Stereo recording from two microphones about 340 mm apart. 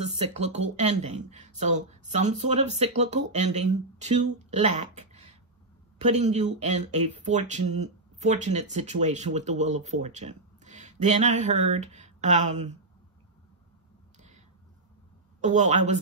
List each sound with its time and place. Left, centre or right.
0.3 s speech: centre
6.2 s speech: right
15.4 s speech: right